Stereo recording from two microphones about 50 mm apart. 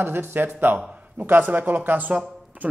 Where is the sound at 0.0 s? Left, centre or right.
Right.